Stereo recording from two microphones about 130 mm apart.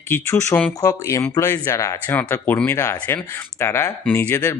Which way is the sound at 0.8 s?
25° left (ahead or behind).